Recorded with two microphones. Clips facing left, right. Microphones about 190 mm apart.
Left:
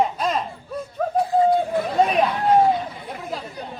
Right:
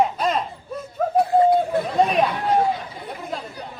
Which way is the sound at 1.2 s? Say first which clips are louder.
Right 2 dB; 60° right (ahead or behind).